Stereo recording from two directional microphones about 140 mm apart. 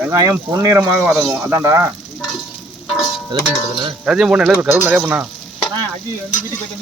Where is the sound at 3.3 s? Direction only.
35° right (ahead or behind).